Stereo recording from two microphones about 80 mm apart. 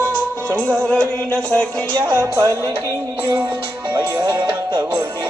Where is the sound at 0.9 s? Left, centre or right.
Right.